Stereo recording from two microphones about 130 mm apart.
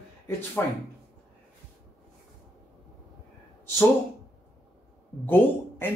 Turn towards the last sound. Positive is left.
turn(degrees=15)  # may be behind; listen again after turning